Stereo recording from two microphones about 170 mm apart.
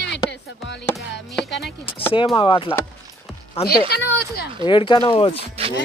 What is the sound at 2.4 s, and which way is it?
Speech, 30° left (ahead or behind).